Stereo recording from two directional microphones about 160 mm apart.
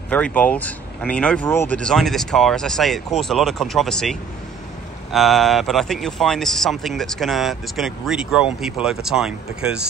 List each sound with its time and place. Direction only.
0.1 s a man's voice: 10° left (ahead or behind)